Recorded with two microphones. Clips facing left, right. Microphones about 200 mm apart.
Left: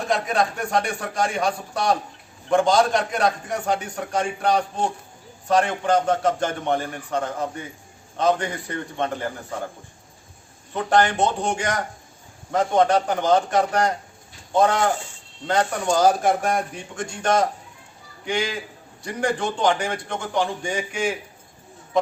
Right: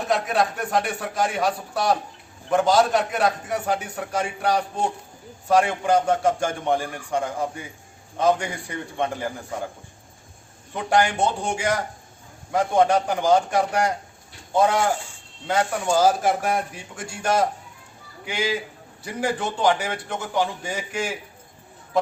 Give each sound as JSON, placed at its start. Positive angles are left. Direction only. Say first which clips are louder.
{"t": 0.1, "sound": "a man's voice", "louder": "even", "side_deg": -5}
{"t": 10.8, "sound": "a man's voice", "louder": "left 1 dB", "side_deg": -10}